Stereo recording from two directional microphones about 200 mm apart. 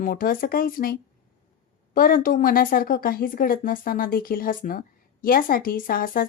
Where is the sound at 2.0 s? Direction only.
45° left (ahead or behind).